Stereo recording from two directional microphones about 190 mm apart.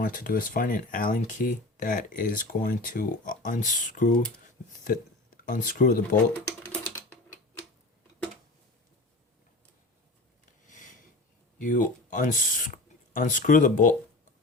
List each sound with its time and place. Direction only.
0.0 s speech: 45° left (ahead or behind)
4.4 s a sound: 45° left (ahead or behind)
5.4 s speech: 45° left (ahead or behind)
6.3 s typing: 5° left (ahead or behind)
10.7 s a sound: 40° left (ahead or behind)
11.6 s speech: 40° left (ahead or behind)